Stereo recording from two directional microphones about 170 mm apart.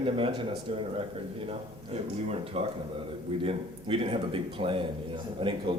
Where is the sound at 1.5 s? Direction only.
35° right (ahead or behind).